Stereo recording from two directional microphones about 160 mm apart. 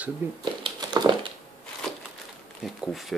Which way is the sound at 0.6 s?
30° right (ahead or behind).